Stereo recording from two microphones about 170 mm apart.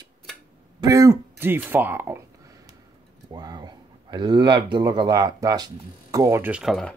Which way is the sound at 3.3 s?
25° right (ahead or behind).